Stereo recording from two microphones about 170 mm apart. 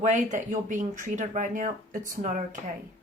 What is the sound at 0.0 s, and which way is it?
Speech, 45° right (ahead or behind).